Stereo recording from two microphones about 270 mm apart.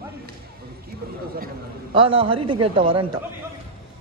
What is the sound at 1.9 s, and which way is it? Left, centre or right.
Speech, centre.